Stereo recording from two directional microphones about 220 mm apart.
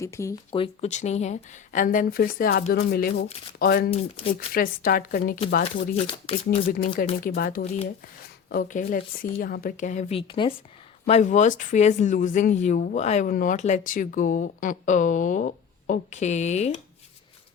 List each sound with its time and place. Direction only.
0.0 s speech: 15° left (ahead or behind)
0.5 s speech: 25° left (ahead or behind); by 5.9 s 45° left (ahead or behind)
6.0 s speech: 25° left (ahead or behind)
6.7 s speech: 40° left (ahead or behind)
7.6 s speech: 30° left (ahead or behind)